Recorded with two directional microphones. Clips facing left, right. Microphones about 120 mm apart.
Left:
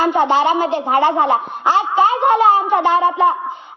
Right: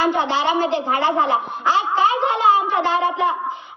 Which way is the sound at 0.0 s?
45° left (ahead or behind).